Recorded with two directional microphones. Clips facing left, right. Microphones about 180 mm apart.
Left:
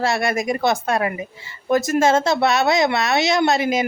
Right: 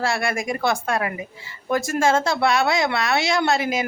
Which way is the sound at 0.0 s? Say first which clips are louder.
Left 3 dB; 20° left (ahead or behind).